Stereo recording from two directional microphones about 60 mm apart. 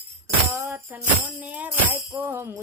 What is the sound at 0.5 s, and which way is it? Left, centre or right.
Tambourine, right.